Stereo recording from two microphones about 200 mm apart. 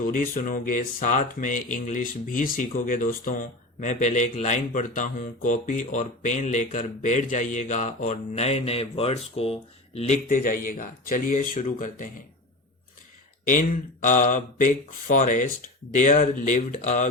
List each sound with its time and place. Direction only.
0.0 s speech: 45° left (ahead or behind)
13.4 s speech: 40° left (ahead or behind)